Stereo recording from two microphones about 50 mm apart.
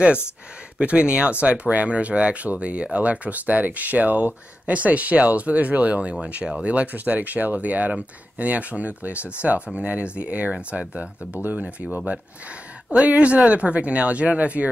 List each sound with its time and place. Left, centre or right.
0.7 s speech: right
13.0 s speech: right